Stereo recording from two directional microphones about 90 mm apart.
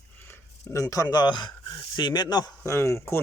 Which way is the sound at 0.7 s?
35° left (ahead or behind).